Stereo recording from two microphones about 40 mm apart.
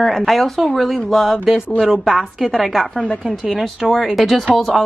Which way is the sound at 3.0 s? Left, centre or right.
Left.